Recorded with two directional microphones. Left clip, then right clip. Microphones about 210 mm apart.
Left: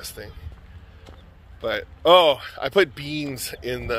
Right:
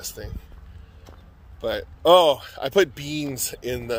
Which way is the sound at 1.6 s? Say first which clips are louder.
Even; 20° right (ahead or behind).